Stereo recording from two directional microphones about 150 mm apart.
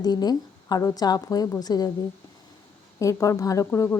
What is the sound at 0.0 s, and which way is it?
A woman's voice, 25° left (ahead or behind).